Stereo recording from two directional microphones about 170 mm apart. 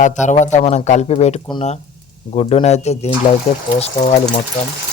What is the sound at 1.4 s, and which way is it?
A man's voice, 25° left (ahead or behind).